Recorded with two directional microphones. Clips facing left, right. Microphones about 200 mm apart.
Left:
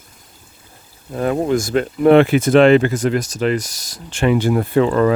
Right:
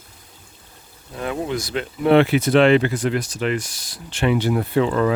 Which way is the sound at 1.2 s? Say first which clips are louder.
Left 7 dB; 45° left (ahead or behind).